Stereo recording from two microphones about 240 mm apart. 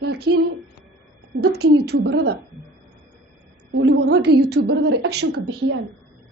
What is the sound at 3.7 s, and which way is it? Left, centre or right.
A woman's voice, right.